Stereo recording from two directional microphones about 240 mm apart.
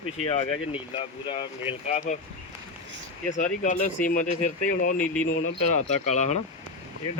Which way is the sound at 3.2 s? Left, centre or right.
Left.